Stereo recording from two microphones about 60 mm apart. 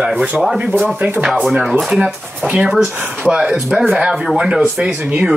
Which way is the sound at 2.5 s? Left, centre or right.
Centre.